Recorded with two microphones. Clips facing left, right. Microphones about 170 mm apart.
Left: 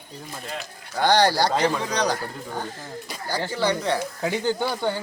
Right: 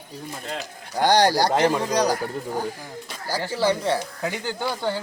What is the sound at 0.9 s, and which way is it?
Speech, 15° right (ahead or behind).